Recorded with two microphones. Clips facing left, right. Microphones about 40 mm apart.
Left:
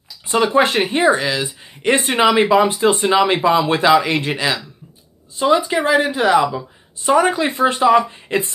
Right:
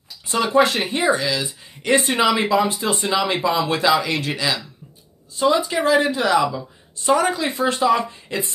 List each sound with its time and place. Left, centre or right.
0.3 s speech: left
5.7 s speech: left